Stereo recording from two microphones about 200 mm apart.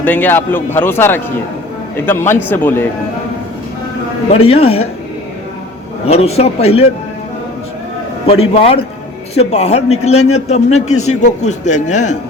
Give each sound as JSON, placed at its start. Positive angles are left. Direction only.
{"t": 0.0, "sound": "speech", "side_deg": 10}
{"t": 4.3, "sound": "a man's voice", "side_deg": 30}
{"t": 6.1, "sound": "a man's voice", "side_deg": 30}
{"t": 8.3, "sound": "a man's voice", "side_deg": 30}